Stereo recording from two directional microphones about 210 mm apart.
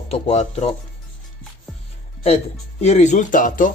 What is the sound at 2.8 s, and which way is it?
Speech, 35° left (ahead or behind).